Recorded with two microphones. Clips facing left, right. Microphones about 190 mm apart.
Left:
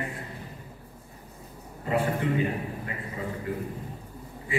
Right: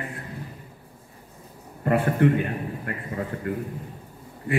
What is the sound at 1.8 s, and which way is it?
Speech, 60° right (ahead or behind).